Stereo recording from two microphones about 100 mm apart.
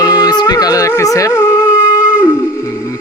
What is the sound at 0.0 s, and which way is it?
Music, 40° left (ahead or behind).